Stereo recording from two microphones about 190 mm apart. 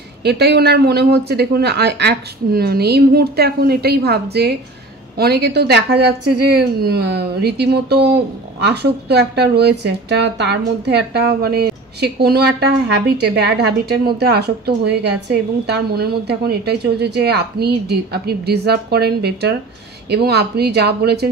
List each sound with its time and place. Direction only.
0.2 s speech: 60° right (ahead or behind)